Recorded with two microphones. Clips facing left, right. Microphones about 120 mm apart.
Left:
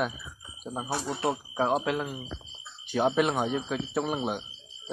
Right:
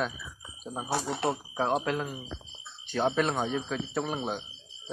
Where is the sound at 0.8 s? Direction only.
20° left (ahead or behind).